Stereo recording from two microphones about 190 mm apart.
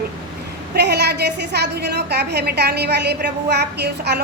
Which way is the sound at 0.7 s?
60° right (ahead or behind).